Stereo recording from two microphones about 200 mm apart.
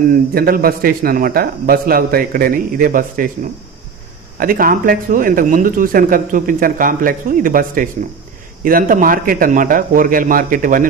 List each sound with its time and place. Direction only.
0.1 s speech: 45° right (ahead or behind)
4.4 s speech: 45° right (ahead or behind)